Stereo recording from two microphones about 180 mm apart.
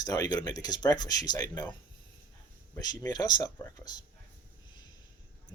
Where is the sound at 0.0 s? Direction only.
20° left (ahead or behind).